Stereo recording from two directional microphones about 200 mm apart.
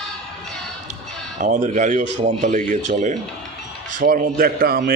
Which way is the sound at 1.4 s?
35° right (ahead or behind).